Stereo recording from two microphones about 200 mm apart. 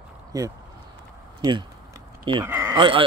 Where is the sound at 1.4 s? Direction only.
25° right (ahead or behind).